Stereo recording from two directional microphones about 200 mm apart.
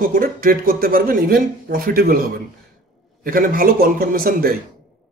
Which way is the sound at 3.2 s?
45° right (ahead or behind).